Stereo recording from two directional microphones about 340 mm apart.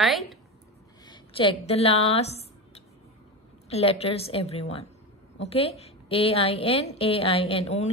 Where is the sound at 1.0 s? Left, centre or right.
Centre.